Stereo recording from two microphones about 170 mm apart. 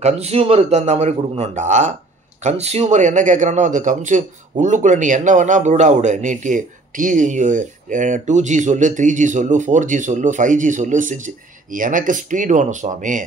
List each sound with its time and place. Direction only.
0.0 s a man's voice: 35° right (ahead or behind)